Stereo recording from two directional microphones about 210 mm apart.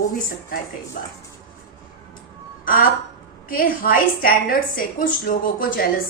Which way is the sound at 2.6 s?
45° left (ahead or behind).